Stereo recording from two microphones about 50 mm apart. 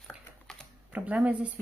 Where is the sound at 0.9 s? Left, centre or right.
Right.